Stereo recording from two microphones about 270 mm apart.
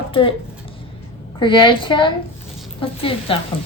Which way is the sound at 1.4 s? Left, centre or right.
Centre.